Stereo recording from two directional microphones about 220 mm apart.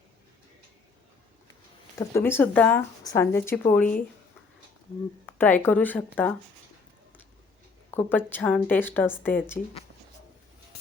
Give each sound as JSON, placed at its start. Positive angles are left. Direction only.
{"t": 2.0, "sound": "speech", "side_deg": 10}
{"t": 5.4, "sound": "speech", "side_deg": 10}
{"t": 7.9, "sound": "speech", "side_deg": 10}